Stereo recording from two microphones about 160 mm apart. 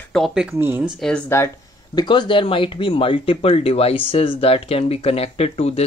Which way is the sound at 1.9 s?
30° left (ahead or behind).